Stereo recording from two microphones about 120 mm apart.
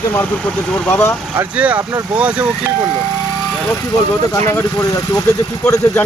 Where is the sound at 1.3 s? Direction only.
10° right (ahead or behind).